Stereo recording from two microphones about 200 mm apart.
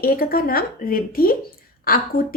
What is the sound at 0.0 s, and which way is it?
A woman's voice, 50° left (ahead or behind).